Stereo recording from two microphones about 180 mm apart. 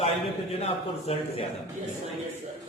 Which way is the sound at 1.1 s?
35° left (ahead or behind).